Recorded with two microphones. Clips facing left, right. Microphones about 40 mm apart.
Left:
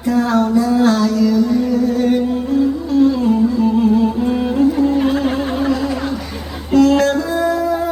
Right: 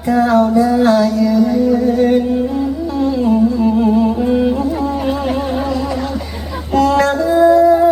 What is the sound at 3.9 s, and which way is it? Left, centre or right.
Music, centre.